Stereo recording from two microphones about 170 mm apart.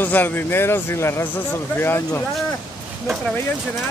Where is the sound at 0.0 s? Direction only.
10° left (ahead or behind).